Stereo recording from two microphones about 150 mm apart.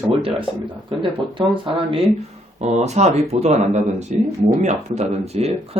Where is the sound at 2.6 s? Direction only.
50° right (ahead or behind).